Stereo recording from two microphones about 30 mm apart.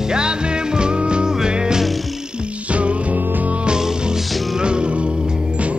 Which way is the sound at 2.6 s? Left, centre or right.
Right.